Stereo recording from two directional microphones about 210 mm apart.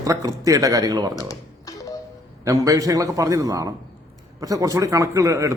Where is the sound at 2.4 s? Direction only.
15° right (ahead or behind).